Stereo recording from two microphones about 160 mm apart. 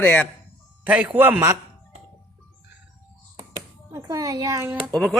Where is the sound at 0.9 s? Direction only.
10° right (ahead or behind).